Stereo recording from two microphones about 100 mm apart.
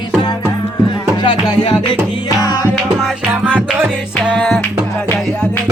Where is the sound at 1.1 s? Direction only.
50° left (ahead or behind).